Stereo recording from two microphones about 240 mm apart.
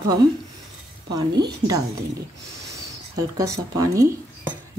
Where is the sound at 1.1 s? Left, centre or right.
Centre.